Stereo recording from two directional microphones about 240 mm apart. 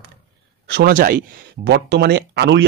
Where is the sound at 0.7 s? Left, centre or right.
Right.